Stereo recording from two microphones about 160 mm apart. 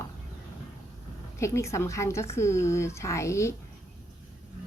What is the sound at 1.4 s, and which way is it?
Speech, 20° left (ahead or behind).